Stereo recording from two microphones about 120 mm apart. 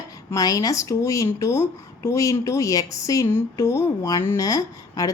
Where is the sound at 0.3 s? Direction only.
30° left (ahead or behind).